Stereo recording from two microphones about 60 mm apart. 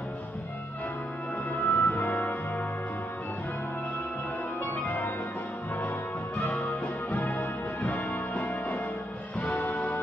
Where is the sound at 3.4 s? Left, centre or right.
Left.